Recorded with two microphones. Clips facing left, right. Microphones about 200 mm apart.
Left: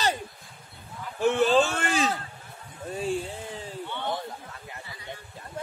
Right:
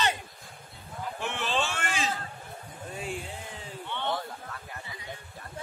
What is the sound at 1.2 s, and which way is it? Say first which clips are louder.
Speech: left 11 dB; 40° left (ahead or behind).